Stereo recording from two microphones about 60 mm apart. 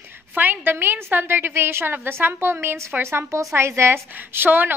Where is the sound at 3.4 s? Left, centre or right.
Right.